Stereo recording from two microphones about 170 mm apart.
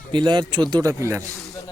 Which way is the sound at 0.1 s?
25° right (ahead or behind).